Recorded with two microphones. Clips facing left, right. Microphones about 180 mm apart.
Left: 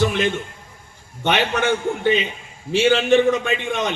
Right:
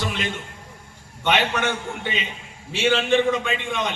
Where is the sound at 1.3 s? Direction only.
50° left (ahead or behind).